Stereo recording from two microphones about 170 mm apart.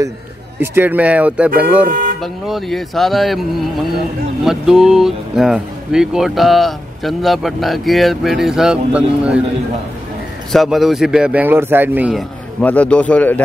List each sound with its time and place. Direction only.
0.6 s speech: 10° right (ahead or behind)
1.9 s speech: 55° right (ahead or behind)
2.4 s speech: centre (ahead or behind)
4.5 s speech: 5° right (ahead or behind)
10.5 s speech: centre (ahead or behind)